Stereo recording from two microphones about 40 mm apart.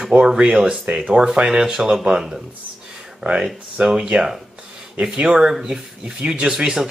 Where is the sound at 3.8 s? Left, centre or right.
Right.